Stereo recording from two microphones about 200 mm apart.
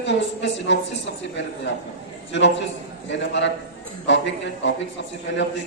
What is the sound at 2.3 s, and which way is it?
Speech, 65° left (ahead or behind).